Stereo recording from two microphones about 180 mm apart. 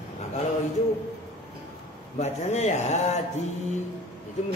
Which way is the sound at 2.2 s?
40° left (ahead or behind).